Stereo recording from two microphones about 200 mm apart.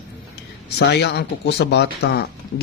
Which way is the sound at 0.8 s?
55° left (ahead or behind).